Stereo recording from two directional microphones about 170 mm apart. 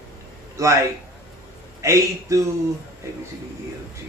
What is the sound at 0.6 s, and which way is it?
Speech, 15° right (ahead or behind).